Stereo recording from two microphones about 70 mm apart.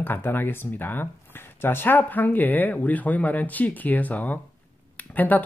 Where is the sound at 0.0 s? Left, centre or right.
Left.